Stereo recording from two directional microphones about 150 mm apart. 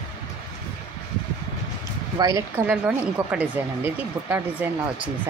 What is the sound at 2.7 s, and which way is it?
Speech, 10° right (ahead or behind).